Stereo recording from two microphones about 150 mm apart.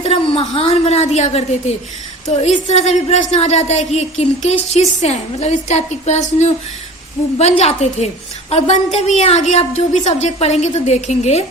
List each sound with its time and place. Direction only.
0.0 s a woman's voice: 40° left (ahead or behind)